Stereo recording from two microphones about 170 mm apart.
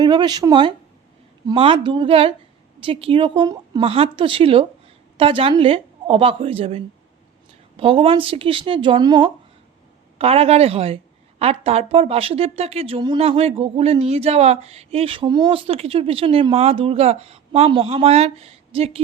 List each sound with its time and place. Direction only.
0.0 s a woman's voice: 25° right (ahead or behind)